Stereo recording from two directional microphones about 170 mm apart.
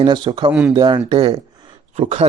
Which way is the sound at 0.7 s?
25° right (ahead or behind).